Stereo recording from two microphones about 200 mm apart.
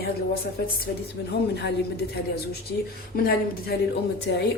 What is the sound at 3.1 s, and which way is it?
Speech, 45° left (ahead or behind).